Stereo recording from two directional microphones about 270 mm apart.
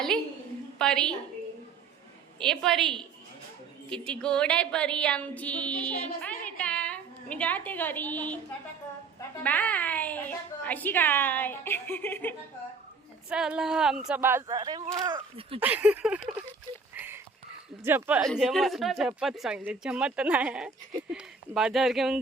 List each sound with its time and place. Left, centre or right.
0.8 s speech: centre
2.4 s speech: centre
6.2 s a sound: centre
9.4 s a woman's voice: centre
13.3 s speech: centre; by 15.6 s right
15.6 s speech: centre
16.9 s a sound: centre
17.8 s speech: centre